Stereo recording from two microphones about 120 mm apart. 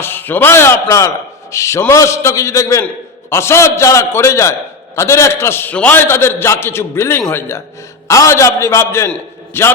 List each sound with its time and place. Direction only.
0.0 s a man's voice: 15° left (ahead or behind)